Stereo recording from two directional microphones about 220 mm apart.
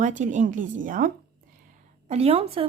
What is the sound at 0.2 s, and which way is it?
A woman's voice, 35° right (ahead or behind).